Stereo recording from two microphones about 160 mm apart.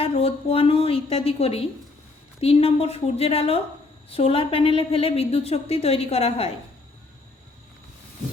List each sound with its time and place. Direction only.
0.0 s a woman's voice: 35° left (ahead or behind)